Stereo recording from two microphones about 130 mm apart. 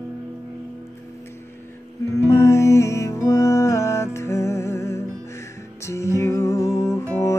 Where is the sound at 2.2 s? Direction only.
20° left (ahead or behind).